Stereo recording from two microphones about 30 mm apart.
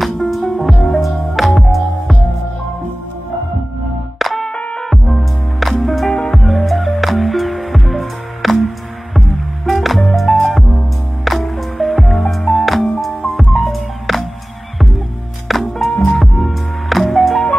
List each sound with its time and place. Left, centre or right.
0.0 s music: centre
1.0 s music: centre
4.2 s music: centre
15.4 s music: centre
15.9 s music: centre
16.2 s music: centre